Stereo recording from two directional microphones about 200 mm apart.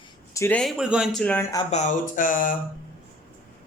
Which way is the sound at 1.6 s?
35° left (ahead or behind).